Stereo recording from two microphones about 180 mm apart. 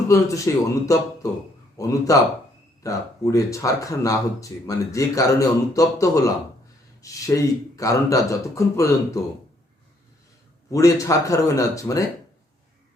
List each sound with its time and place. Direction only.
0.1 s a man's voice: 15° left (ahead or behind)
10.7 s speech: 20° left (ahead or behind)